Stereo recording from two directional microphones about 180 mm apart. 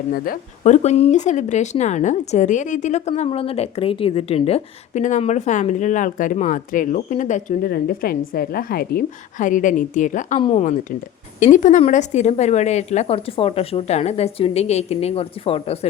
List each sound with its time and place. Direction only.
0.1 s speech: 45° left (ahead or behind)